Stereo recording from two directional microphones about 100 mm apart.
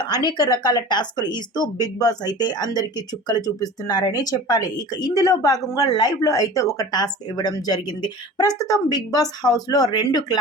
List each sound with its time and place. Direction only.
0.3 s speech: 40° left (ahead or behind)